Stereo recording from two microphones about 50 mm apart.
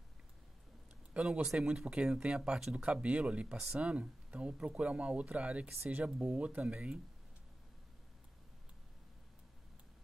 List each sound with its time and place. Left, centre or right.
1.4 s speech: centre
1.7 s speech: right
2.8 s speech: right
3.4 s speech: centre; by 6.6 s right
6.7 s speech: centre